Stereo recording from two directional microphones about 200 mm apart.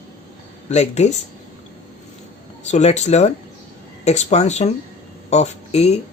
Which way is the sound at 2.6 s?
35° left (ahead or behind).